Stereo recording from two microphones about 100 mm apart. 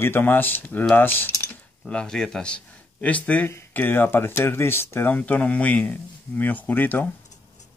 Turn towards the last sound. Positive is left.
turn(degrees=15)  # may be behind; listen again after turning